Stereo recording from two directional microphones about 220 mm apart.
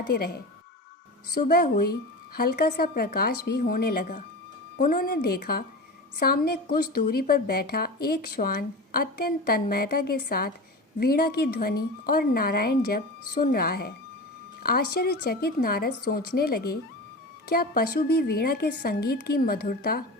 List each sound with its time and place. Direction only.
0.1 s a woman's voice: 45° left (ahead or behind)